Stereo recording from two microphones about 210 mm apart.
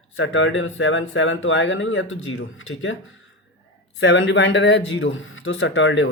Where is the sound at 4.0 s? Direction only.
65° left (ahead or behind).